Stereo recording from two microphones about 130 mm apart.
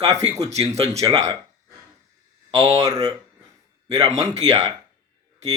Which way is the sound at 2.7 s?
25° right (ahead or behind).